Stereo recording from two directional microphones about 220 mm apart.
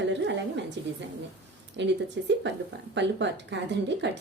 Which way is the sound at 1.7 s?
55° right (ahead or behind).